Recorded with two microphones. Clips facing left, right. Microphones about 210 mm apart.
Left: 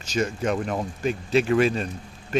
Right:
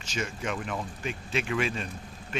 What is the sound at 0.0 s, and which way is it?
Speech, 40° left (ahead or behind).